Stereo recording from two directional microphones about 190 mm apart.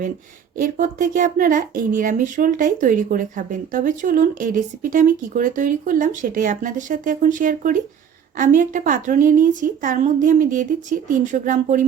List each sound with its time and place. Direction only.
0.5 s speech: 45° right (ahead or behind)